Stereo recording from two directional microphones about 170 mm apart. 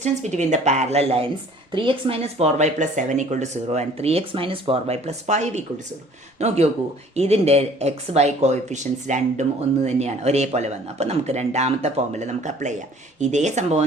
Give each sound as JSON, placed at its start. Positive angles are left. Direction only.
{"t": 0.0, "sound": "speech", "side_deg": -45}